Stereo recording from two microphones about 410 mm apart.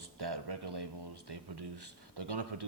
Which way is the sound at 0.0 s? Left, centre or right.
Right.